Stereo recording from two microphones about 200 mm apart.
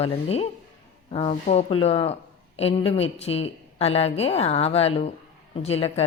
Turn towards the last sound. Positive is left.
turn(degrees=30)  # may be behind; listen again after turning